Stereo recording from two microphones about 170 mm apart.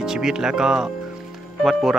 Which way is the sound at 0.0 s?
5° right (ahead or behind).